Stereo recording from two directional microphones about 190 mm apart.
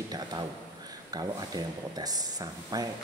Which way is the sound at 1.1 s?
20° right (ahead or behind).